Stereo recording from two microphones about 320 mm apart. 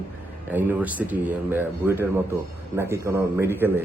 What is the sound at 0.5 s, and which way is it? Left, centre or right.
A man's voice, centre.